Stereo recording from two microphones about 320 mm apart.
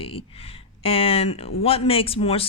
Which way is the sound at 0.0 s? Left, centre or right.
Centre.